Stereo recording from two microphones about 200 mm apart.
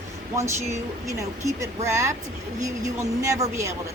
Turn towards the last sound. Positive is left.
turn(degrees=-15)  # may be behind; listen again after turning